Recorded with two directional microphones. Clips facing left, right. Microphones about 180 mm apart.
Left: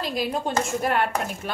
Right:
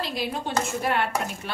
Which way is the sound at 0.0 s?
45° left (ahead or behind).